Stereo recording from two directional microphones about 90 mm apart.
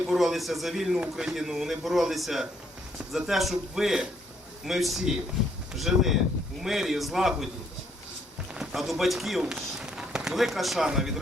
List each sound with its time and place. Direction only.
0.1 s a man's voice: centre (ahead or behind)
8.5 s speech: centre (ahead or behind)